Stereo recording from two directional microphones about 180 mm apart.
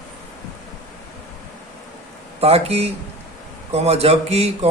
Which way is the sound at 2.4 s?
35° right (ahead or behind).